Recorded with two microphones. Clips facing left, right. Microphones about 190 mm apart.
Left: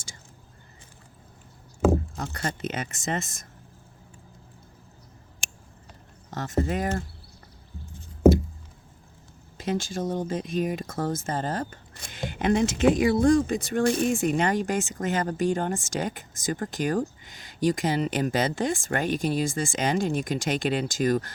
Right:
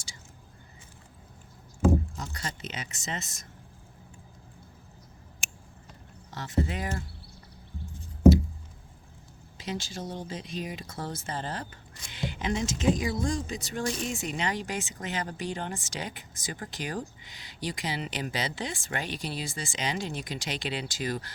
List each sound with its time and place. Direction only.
1.8 s speech: 75° left (ahead or behind); by 3.4 s 50° left (ahead or behind)
6.3 s speech: 45° left (ahead or behind)
9.6 s speech: 50° left (ahead or behind)